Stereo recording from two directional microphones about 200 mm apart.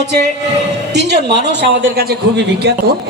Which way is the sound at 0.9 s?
60° right (ahead or behind).